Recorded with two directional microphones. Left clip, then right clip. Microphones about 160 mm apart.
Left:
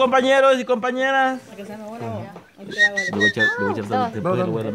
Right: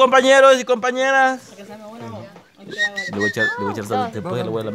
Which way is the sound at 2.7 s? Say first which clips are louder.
Left 4 dB; 5° right (ahead or behind).